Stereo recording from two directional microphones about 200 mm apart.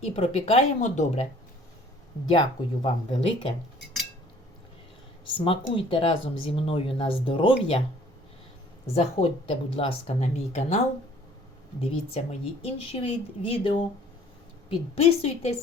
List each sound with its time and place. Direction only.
0.0 s speech: 30° left (ahead or behind)
2.3 s speech: 25° left (ahead or behind)
5.2 s speech: 25° left (ahead or behind)
9.0 s speech: 30° left (ahead or behind)
15.0 s speech: 30° left (ahead or behind)